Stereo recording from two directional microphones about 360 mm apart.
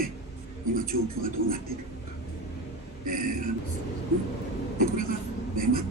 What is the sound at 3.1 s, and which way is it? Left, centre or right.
Speech, right.